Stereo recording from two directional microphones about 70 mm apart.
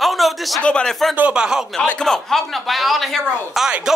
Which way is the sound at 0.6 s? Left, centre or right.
Centre.